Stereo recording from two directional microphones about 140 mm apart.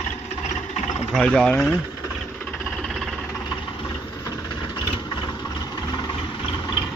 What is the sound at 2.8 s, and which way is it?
Vehicle, centre (ahead or behind).